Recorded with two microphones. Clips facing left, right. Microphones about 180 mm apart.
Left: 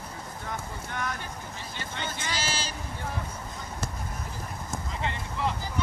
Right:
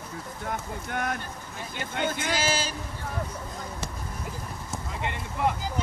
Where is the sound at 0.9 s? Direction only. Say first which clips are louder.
Right 4 dB; 55° right (ahead or behind).